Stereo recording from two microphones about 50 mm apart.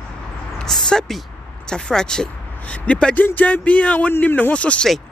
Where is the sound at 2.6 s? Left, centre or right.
Left.